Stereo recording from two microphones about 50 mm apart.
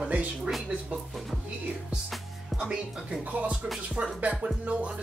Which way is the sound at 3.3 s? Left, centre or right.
Right.